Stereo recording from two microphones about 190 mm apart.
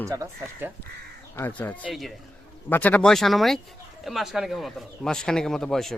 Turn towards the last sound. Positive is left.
turn(degrees=0)  # may be behind; listen again after turning